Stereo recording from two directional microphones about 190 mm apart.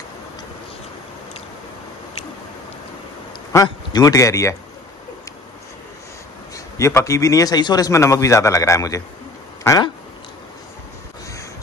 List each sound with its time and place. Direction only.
3.5 s a man's voice: 20° left (ahead or behind)
6.5 s a man's voice: 15° left (ahead or behind)
9.6 s a sound: 15° left (ahead or behind)